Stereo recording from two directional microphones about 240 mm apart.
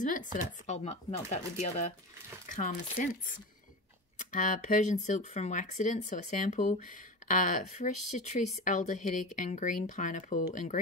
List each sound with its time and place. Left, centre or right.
0.0 s speech: left
4.2 s speech: left